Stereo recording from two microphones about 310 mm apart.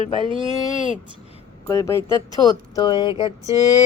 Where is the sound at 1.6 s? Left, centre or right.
Centre.